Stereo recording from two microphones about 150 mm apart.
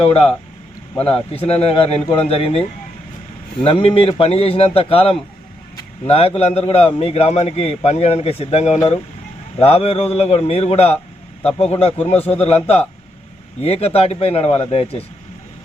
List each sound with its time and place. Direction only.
0.0 s a man's voice: 40° left (ahead or behind)